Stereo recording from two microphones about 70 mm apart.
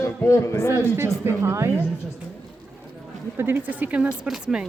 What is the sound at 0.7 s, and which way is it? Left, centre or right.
Speech, right.